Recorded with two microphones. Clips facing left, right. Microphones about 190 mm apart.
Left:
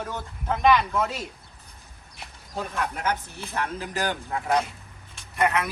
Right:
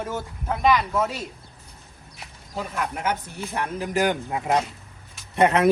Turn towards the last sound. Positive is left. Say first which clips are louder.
# right 6 dB
turn(degrees=-30)  # may be behind; listen again after turning